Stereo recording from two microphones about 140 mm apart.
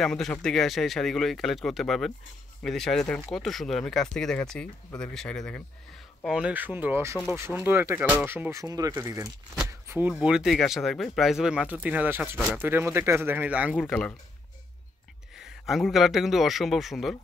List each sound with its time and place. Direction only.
0.0 s speech: 5° left (ahead or behind)
6.2 s speech: 5° right (ahead or behind)
9.7 s a sound: 15° right (ahead or behind)
10.2 s speech: 5° right (ahead or behind)
15.6 s speech: centre (ahead or behind)